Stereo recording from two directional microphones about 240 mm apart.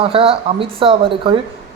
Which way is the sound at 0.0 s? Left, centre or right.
Right.